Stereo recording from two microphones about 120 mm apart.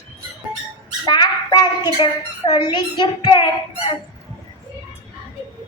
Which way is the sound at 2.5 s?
40° left (ahead or behind).